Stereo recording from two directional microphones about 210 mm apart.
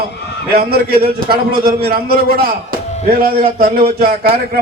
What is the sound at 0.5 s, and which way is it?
A man's voice, 45° right (ahead or behind).